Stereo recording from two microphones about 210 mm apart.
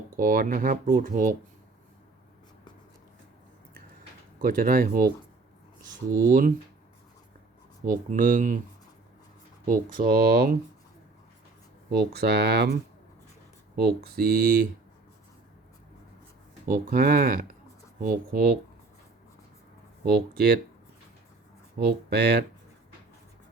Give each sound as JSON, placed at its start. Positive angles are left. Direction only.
{"t": 0.2, "sound": "speech", "side_deg": -40}
{"t": 4.4, "sound": "speech", "side_deg": -40}
{"t": 6.1, "sound": "speech", "side_deg": -40}
{"t": 7.9, "sound": "speech", "side_deg": -40}
{"t": 9.6, "sound": "speech", "side_deg": -40}
{"t": 11.9, "sound": "speech", "side_deg": -50}
{"t": 13.7, "sound": "speech", "side_deg": -50}
{"t": 16.6, "sound": "speech", "side_deg": -40}
{"t": 20.1, "sound": "speech", "side_deg": -50}
{"t": 21.8, "sound": "speech", "side_deg": -50}